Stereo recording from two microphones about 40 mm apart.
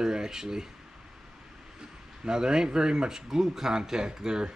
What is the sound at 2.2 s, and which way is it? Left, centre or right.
Speech, centre.